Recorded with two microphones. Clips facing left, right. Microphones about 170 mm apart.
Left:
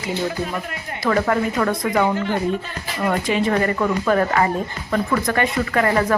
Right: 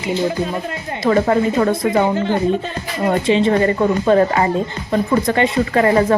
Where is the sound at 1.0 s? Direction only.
25° right (ahead or behind).